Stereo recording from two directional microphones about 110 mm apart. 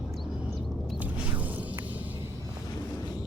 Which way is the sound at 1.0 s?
15° right (ahead or behind).